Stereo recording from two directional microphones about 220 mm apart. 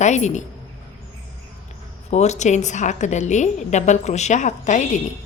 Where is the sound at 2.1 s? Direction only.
30° left (ahead or behind).